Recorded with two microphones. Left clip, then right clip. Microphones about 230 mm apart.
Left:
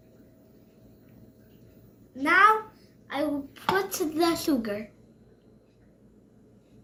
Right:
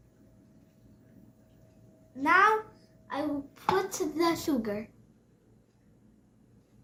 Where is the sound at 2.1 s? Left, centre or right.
Right.